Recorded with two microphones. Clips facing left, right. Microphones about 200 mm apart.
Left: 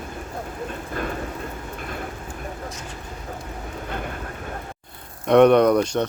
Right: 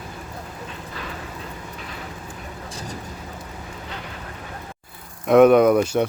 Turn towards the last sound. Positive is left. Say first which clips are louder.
# right 1 dB
turn(degrees=-5)  # may be behind; listen again after turning